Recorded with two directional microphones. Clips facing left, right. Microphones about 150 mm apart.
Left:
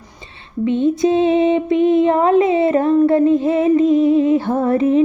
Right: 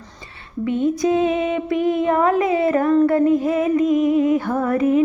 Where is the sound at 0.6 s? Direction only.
25° left (ahead or behind).